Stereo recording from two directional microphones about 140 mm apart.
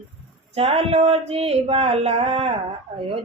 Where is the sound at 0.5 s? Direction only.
45° right (ahead or behind).